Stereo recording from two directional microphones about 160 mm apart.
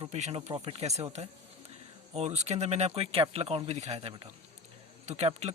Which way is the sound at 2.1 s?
45° right (ahead or behind).